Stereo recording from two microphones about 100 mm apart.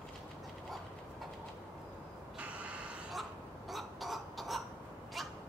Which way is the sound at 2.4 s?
10° right (ahead or behind).